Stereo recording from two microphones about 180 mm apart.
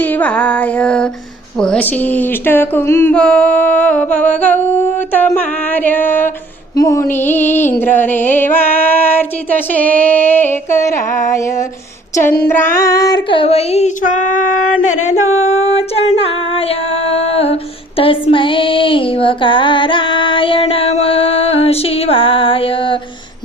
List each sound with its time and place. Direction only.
0.0 s speech: 10° left (ahead or behind)
12.1 s child singing: 20° left (ahead or behind); by 14.2 s 45° left (ahead or behind)
14.8 s female singing: 40° left (ahead or behind)